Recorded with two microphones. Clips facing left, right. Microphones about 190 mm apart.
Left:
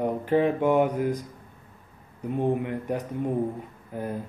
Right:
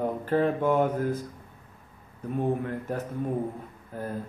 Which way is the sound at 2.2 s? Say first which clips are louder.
Left 2 dB; 15° left (ahead or behind).